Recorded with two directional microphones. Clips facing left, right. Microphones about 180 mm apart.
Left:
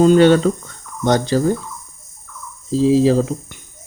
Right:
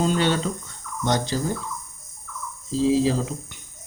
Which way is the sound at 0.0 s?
55° left (ahead or behind).